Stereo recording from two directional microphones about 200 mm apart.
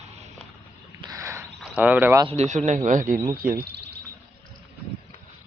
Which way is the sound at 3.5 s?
50° right (ahead or behind).